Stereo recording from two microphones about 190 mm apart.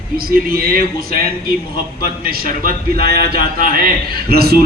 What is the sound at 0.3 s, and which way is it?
Speech, 55° right (ahead or behind).